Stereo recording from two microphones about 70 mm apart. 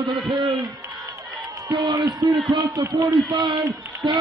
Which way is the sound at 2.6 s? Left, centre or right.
Right.